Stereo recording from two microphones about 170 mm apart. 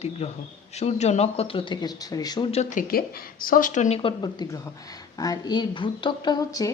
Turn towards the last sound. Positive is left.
turn(degrees=20)  # may be behind; listen again after turning